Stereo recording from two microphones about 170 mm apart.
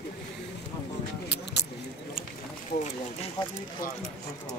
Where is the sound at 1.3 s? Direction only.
80° left.